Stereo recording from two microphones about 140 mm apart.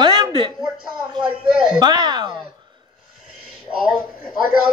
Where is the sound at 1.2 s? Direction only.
5° right (ahead or behind).